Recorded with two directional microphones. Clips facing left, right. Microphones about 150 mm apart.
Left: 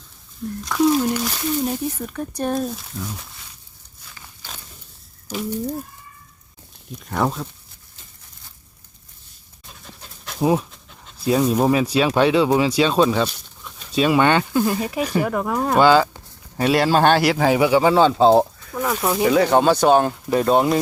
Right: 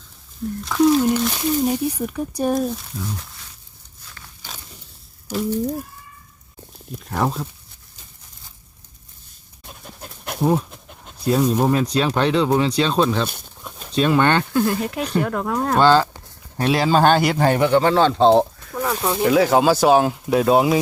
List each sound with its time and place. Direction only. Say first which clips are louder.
0.6 s a man's voice: right 2 dB; centre (ahead or behind)
1.6 s speech: right 3 dB; 10° right (ahead or behind)
2.7 s a man's voice: right 2 dB; centre (ahead or behind)
4.0 s a sound: right 1 dB; centre (ahead or behind)
5.3 s speech: right 4 dB; 5° left (ahead or behind)
7.1 s a man's voice: even; centre (ahead or behind)
9.6 s pant: right 4 dB; 55° right (ahead or behind)
10.7 s dog: right 4 dB; 55° right (ahead or behind)
11.3 s speech: even; 5° left (ahead or behind)
13.2 s pigeon: left 2 dB; 50° right (ahead or behind)
13.9 s a man's voice: left 1 dB; 5° left (ahead or behind)